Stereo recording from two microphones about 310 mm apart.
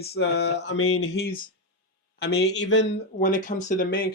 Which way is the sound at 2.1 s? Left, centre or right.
Left.